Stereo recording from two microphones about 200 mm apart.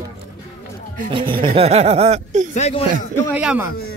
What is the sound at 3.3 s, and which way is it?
Speech, 5° right (ahead or behind).